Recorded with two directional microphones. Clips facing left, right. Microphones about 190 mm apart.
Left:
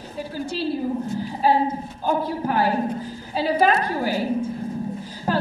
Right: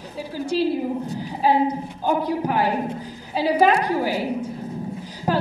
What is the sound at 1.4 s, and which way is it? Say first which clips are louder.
A woman's voice: right 1 dB; 15° right (ahead or behind).